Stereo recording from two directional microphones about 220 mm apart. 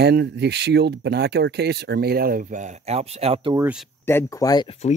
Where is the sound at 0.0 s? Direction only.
50° right (ahead or behind); by 3.5 s 30° right (ahead or behind).